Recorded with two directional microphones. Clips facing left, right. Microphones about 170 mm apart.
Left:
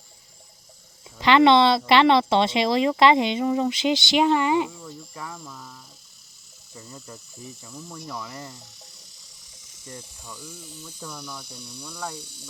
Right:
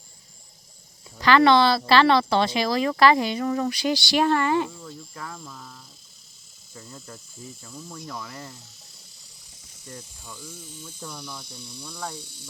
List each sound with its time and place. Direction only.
1.2 s speech: 20° left (ahead or behind)
4.7 s speech: 5° left (ahead or behind)
10.2 s speech: centre (ahead or behind)